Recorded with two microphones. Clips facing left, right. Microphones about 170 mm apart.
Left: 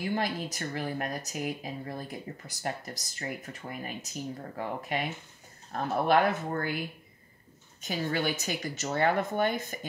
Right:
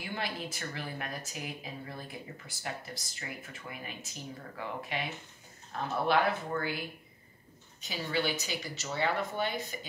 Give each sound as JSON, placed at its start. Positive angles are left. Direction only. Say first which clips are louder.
{"t": 0.0, "sound": "speech", "louder": "left 6 dB", "side_deg": 40}
{"t": 7.8, "sound": "speech", "louder": "left 3 dB", "side_deg": 50}